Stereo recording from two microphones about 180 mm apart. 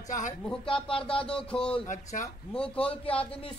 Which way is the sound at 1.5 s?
5° left (ahead or behind).